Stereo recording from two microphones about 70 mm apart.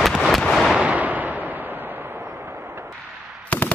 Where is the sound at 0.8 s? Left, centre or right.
Right.